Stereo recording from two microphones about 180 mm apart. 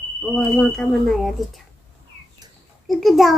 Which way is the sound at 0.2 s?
Centre (ahead or behind).